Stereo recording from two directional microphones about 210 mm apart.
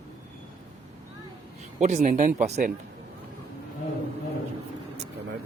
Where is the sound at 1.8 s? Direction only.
35° right (ahead or behind).